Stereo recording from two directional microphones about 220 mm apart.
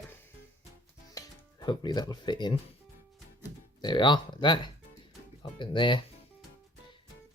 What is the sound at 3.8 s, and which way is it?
Speech, 20° left (ahead or behind).